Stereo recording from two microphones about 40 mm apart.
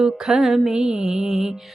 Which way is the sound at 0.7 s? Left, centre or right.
Centre.